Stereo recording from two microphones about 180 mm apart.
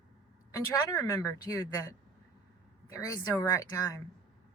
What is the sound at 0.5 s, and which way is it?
A man's voice, 20° left (ahead or behind).